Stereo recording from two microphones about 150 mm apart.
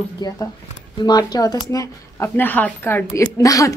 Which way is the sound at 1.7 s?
15° left (ahead or behind).